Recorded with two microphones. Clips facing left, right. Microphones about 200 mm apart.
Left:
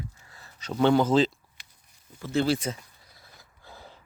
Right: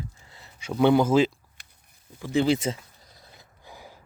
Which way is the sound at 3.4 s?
15° right (ahead or behind).